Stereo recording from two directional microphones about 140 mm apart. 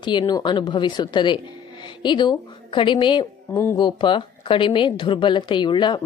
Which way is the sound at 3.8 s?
35° left (ahead or behind).